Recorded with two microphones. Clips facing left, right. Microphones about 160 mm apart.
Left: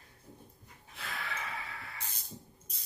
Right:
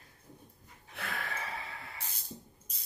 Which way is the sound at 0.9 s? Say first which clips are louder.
Right 3 dB; 55° right (ahead or behind).